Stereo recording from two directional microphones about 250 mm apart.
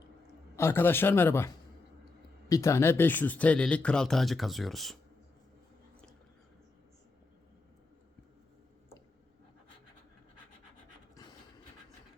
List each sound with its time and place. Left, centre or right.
0.5 s speech: centre
2.5 s speech: centre
11.1 s a sound: centre